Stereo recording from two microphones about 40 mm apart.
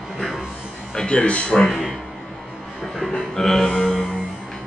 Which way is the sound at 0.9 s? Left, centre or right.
Left.